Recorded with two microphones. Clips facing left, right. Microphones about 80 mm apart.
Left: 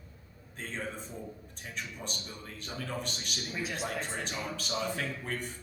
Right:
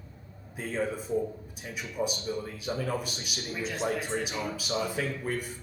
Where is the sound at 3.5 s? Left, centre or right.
Centre.